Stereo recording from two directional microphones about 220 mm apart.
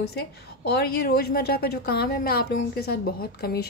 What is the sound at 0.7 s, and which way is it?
A woman's voice, 45° left (ahead or behind).